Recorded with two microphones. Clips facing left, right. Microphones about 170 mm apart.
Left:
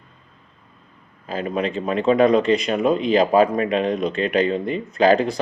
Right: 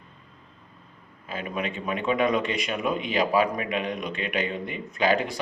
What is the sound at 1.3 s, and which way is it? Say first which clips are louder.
Speech: left 7 dB; 35° left (ahead or behind).